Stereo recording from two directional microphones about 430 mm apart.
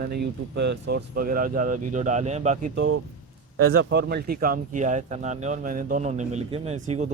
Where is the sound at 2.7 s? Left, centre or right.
Right.